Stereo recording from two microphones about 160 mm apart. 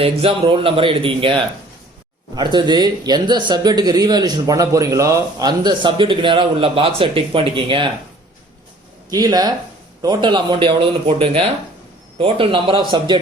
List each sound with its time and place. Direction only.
0.0 s speech: 35° right (ahead or behind)
9.0 s speech: 25° right (ahead or behind)